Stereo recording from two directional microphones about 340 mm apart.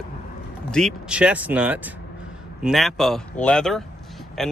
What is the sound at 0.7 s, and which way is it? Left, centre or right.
Speech, centre.